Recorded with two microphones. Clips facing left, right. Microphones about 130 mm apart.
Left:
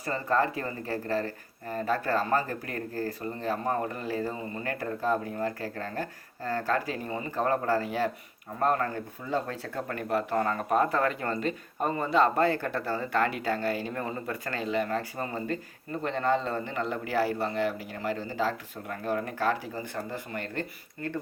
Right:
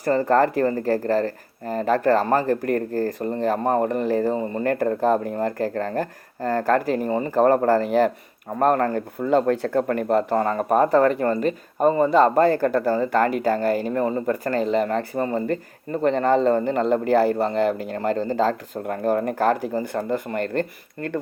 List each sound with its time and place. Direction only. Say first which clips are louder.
0.3 s speech: right 6 dB; 65° right (ahead or behind)
0.6 s speech: right 12 dB; 45° right (ahead or behind)
16.0 s speech: right 10 dB; 50° right (ahead or behind)